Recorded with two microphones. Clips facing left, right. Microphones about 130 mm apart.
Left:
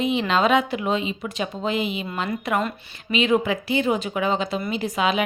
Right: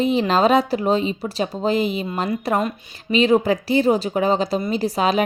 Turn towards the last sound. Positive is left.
turn(degrees=-40)  # may be behind; listen again after turning